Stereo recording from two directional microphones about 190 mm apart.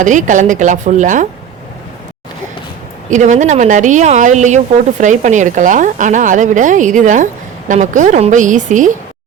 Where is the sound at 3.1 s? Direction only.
40° right (ahead or behind).